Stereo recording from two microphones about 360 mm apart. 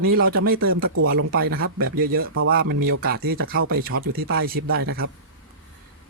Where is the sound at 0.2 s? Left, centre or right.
Right.